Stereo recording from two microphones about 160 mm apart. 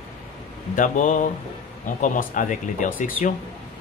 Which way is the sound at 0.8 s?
55° left (ahead or behind).